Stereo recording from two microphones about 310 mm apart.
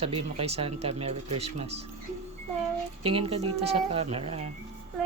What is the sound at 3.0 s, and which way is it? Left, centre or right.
Speech, centre.